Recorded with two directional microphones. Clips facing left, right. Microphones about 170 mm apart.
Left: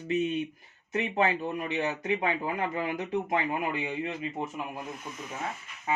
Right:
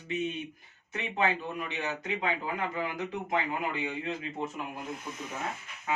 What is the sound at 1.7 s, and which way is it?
Speech, 20° left (ahead or behind).